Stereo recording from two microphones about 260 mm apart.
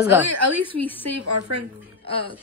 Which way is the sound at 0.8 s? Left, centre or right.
Centre.